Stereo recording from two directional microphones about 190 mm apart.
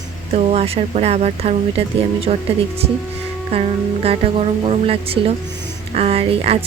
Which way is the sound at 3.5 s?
30° right (ahead or behind).